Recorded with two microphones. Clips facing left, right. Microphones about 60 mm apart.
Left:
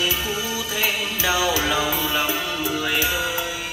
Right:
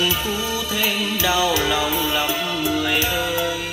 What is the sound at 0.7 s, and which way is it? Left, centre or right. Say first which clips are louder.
Music: right 1 dB; left.